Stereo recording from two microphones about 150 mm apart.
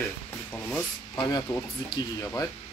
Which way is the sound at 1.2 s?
25° left (ahead or behind).